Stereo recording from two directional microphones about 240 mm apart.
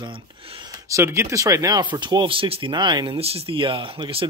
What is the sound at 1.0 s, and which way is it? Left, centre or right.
Speech, centre.